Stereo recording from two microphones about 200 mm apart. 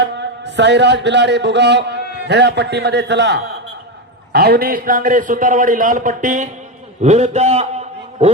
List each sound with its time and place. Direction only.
0.0 s a man's voice: 60° right (ahead or behind); by 8.3 s 30° right (ahead or behind)